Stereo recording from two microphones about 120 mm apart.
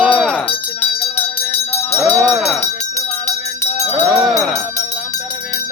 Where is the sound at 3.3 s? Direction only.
70° left (ahead or behind).